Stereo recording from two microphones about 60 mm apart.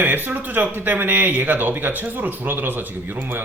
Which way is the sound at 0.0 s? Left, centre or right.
Right.